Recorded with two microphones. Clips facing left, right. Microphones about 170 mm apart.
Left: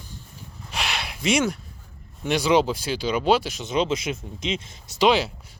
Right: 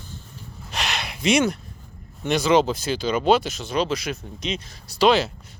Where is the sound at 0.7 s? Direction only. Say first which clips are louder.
Right 1 dB; 5° left (ahead or behind).